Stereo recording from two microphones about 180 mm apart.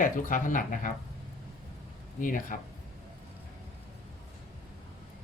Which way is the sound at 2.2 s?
50° left (ahead or behind).